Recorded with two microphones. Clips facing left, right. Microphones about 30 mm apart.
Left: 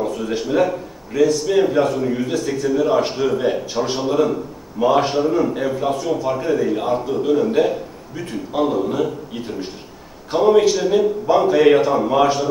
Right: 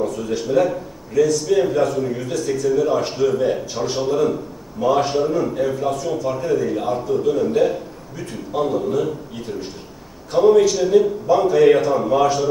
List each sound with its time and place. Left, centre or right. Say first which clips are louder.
0.0 s a man's voice: even; left